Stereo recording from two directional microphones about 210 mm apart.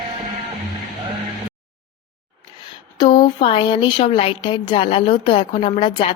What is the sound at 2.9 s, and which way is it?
A woman's voice, 20° left (ahead or behind).